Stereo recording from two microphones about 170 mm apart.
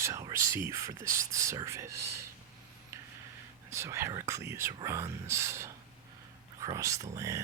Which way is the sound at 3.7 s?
15° right (ahead or behind).